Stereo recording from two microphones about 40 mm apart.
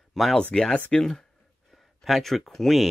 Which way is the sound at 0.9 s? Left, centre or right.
Centre.